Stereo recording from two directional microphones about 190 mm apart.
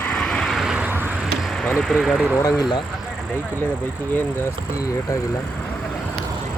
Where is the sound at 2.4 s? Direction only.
20° left (ahead or behind).